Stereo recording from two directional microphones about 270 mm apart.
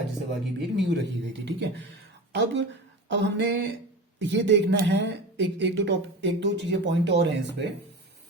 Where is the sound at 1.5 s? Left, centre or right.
Right.